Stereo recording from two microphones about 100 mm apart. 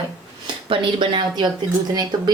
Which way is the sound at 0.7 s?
55° right (ahead or behind).